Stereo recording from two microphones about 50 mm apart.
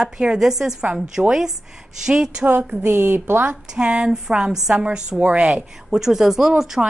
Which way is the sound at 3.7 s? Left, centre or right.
Centre.